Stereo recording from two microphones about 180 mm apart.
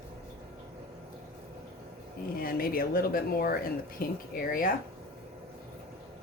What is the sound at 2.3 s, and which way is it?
Speech, 55° left (ahead or behind).